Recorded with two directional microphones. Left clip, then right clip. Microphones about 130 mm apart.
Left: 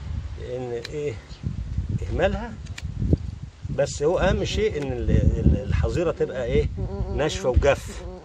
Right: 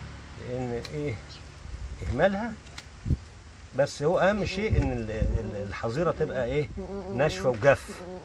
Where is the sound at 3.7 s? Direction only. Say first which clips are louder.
Left 2 dB; 50° left (ahead or behind).